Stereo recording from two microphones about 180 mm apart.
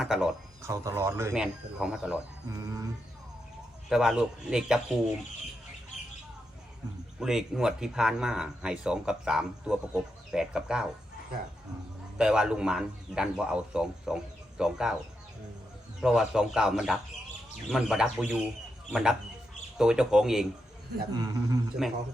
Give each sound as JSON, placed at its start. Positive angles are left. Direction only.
{"t": 0.0, "sound": "speech", "side_deg": -5}
{"t": 0.6, "sound": "speech", "side_deg": -15}
{"t": 1.3, "sound": "speech", "side_deg": -5}
{"t": 2.5, "sound": "bird", "side_deg": -20}
{"t": 3.8, "sound": "speech", "side_deg": -5}
{"t": 7.2, "sound": "speech", "side_deg": 0}
{"t": 12.1, "sound": "speech", "side_deg": -5}
{"t": 16.0, "sound": "speech", "side_deg": 0}
{"t": 21.8, "sound": "speech", "side_deg": 0}